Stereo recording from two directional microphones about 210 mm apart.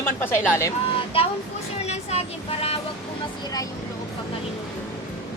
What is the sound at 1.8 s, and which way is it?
Vehicle, 30° left (ahead or behind).